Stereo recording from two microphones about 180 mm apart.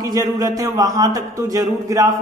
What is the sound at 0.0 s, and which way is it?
A woman's voice, 20° right (ahead or behind).